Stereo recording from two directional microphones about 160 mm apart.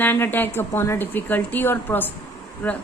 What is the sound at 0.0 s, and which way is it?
Speech, 10° left (ahead or behind).